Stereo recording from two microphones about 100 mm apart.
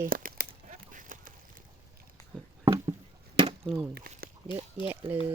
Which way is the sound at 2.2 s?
40° left (ahead or behind).